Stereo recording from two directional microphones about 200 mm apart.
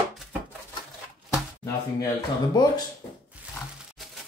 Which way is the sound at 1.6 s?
15° left (ahead or behind).